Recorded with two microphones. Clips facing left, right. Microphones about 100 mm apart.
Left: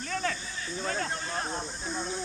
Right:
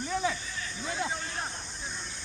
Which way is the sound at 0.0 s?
10° right (ahead or behind).